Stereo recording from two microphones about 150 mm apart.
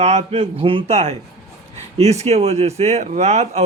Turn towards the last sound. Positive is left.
turn(degrees=-45)  # may be behind; listen again after turning